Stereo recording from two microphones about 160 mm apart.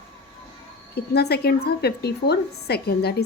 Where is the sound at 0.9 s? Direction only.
85° left.